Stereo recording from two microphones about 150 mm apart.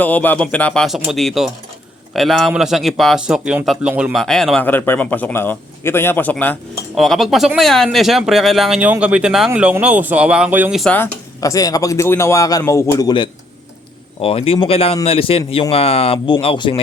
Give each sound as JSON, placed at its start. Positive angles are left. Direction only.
{"t": 0.0, "sound": "a man's voice", "side_deg": 10}
{"t": 4.6, "sound": "a man's voice", "side_deg": 10}
{"t": 6.9, "sound": "a man's voice", "side_deg": 0}
{"t": 10.8, "sound": "a man's voice", "side_deg": 10}
{"t": 11.3, "sound": "a man's voice", "side_deg": 25}